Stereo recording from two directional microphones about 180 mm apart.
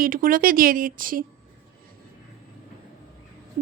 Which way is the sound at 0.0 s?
50° right (ahead or behind).